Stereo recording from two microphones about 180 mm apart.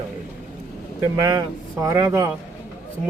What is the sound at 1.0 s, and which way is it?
Speech, 20° right (ahead or behind).